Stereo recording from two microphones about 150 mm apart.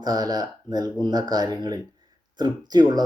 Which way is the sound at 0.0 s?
25° right (ahead or behind).